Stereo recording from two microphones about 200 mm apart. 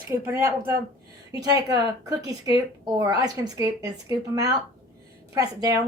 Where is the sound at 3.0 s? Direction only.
20° right (ahead or behind).